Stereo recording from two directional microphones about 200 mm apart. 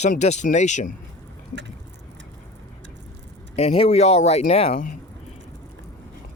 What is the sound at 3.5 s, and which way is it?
Speech, 30° left (ahead or behind).